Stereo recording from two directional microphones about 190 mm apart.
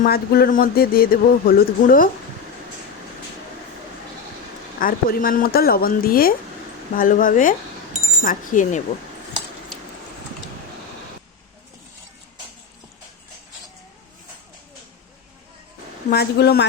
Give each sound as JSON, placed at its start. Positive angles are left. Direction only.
{"t": 0.0, "sound": "speech", "side_deg": 50}
{"t": 4.8, "sound": "speech", "side_deg": 50}
{"t": 16.0, "sound": "a woman's voice", "side_deg": 60}